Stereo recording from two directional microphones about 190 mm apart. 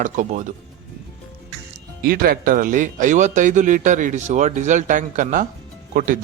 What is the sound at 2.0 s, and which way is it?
Speech, 50° right (ahead or behind).